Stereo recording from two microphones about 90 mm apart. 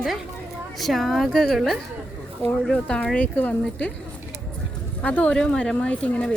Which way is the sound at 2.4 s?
90° right.